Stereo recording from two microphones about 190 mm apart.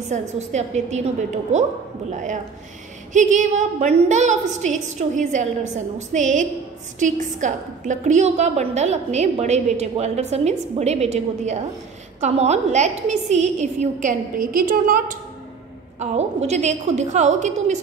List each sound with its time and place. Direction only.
0.1 s a woman's voice: 40° right (ahead or behind)
3.1 s a woman's voice: 40° right (ahead or behind)
12.2 s a woman's voice: 35° right (ahead or behind)
16.0 s a woman's voice: 35° right (ahead or behind)